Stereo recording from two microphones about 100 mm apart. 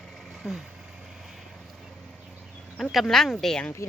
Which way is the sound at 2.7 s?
Centre (ahead or behind).